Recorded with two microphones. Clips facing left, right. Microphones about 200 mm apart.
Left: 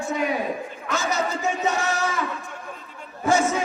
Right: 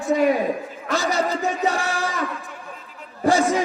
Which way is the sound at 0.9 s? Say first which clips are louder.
Right 3 dB; 35° right (ahead or behind).